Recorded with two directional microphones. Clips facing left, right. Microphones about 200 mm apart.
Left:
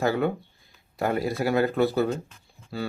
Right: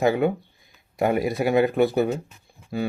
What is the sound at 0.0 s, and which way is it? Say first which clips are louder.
Speech: right 4 dB; 20° right (ahead or behind).